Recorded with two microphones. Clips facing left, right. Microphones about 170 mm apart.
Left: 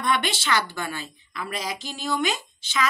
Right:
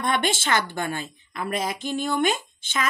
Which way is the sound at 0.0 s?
50° right (ahead or behind).